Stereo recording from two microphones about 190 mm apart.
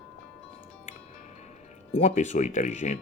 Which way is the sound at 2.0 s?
40° left (ahead or behind).